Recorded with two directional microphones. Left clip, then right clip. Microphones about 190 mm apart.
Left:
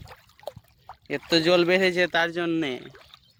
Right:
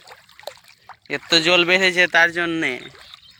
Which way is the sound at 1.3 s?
20° left (ahead or behind).